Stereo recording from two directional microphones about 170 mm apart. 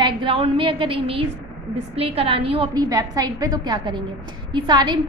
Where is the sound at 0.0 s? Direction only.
30° right (ahead or behind).